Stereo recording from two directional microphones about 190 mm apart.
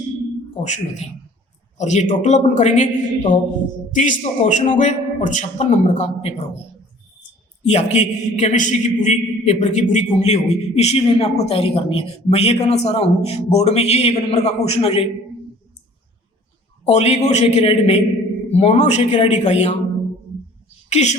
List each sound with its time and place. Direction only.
0.6 s a man's voice: 35° left (ahead or behind)
7.6 s a man's voice: 35° left (ahead or behind)
16.8 s a man's voice: 35° left (ahead or behind)
20.9 s a man's voice: 35° left (ahead or behind)